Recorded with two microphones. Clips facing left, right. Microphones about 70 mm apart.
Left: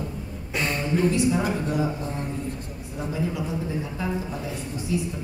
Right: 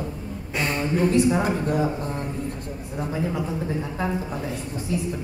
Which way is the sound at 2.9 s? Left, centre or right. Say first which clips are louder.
Right 2 dB; right.